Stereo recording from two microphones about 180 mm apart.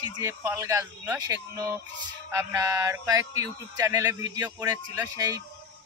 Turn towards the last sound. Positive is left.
turn(degrees=-20)  # may be behind; listen again after turning